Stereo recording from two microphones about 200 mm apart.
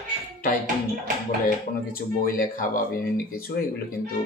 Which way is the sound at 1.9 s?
45° left (ahead or behind).